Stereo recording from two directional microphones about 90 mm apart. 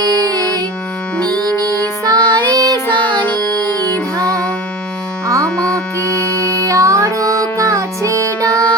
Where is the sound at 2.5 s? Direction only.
45° right (ahead or behind).